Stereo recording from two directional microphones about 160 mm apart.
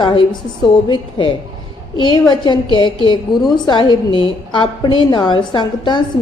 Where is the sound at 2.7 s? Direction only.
30° left (ahead or behind).